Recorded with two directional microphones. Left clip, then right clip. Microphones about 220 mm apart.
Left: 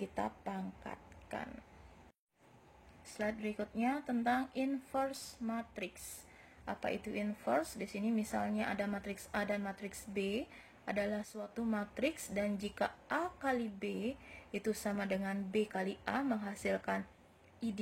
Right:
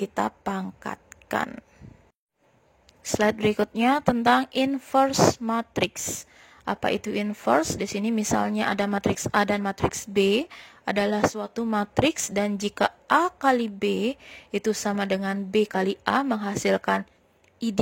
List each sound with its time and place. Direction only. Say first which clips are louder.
0.0 s speech: right 13 dB; 45° right (ahead or behind)
3.0 s a woman's voice: right 17 dB; 50° right (ahead or behind)